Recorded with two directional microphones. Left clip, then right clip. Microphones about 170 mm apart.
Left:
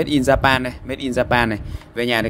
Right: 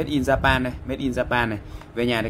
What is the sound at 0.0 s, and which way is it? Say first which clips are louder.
Speech: left 5 dB; 45° left (ahead or behind).